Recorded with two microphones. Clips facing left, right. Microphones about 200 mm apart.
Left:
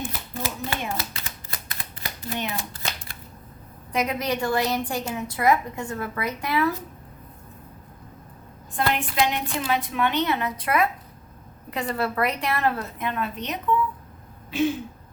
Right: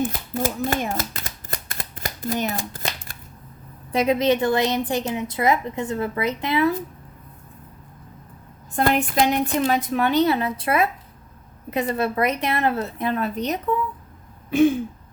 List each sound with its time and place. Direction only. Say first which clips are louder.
0.0 s shuffling cards: right 7 dB; 45° right (ahead or behind)
3.9 s a woman's voice: right 7 dB; 30° right (ahead or behind)
8.7 s a woman's voice: right 5 dB; 45° right (ahead or behind)